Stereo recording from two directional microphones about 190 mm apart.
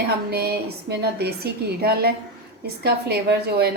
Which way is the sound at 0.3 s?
55° right (ahead or behind).